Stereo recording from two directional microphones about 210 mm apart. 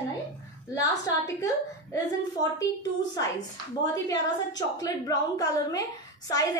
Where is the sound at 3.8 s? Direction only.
15° left (ahead or behind).